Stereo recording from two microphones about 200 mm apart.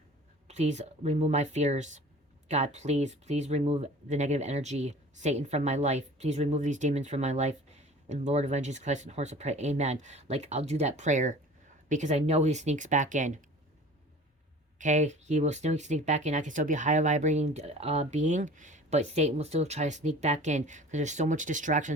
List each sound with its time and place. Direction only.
0.4 s speech: 35° right (ahead or behind)
14.8 s speech: 35° right (ahead or behind)